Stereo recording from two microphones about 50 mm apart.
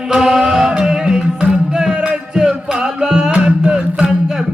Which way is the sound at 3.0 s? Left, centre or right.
Centre.